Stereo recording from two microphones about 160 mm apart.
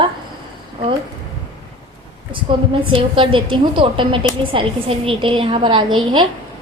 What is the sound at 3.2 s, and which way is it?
A woman's voice, 30° right (ahead or behind).